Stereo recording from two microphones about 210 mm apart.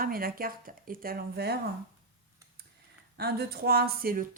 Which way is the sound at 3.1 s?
50° right (ahead or behind).